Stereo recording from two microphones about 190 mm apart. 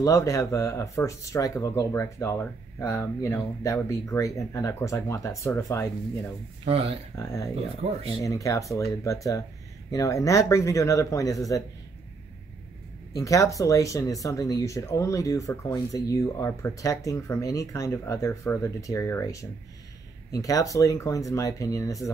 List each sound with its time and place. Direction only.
0.0 s speech: 15° left (ahead or behind)
13.1 s speech: 15° left (ahead or behind)